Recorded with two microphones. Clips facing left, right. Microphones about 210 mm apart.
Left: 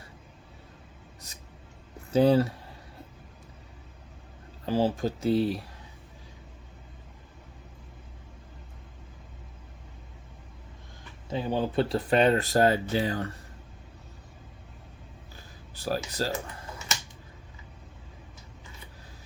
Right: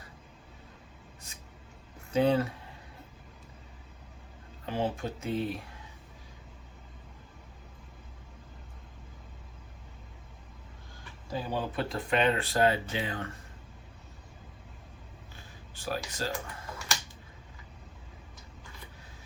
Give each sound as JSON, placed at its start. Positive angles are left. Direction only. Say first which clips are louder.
{"t": 2.1, "sound": "speech", "louder": "left 5 dB", "side_deg": 35}
{"t": 4.6, "sound": "speech", "louder": "left 6 dB", "side_deg": 35}
{"t": 11.3, "sound": "speech", "louder": "left 5 dB", "side_deg": 25}
{"t": 15.7, "sound": "a sound", "louder": "left 5 dB", "side_deg": 35}
{"t": 16.0, "sound": "speech", "louder": "left 4 dB", "side_deg": 35}